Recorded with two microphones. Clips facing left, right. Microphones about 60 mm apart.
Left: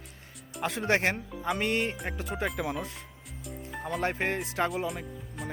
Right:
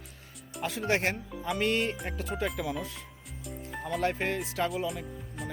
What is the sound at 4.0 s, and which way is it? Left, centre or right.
Speech, left.